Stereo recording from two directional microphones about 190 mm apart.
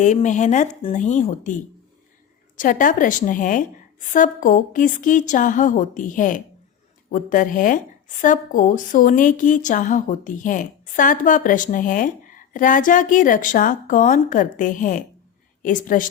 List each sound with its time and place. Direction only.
0.0 s a woman's voice: 40° left (ahead or behind)